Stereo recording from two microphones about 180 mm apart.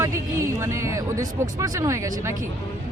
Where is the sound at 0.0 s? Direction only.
15° right (ahead or behind).